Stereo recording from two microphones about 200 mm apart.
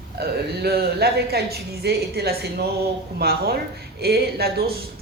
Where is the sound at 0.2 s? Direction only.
50° right (ahead or behind).